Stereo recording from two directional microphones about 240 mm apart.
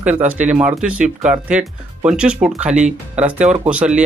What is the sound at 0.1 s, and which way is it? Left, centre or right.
Speech, centre.